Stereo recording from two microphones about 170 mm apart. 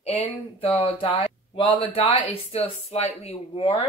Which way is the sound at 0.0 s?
35° left (ahead or behind).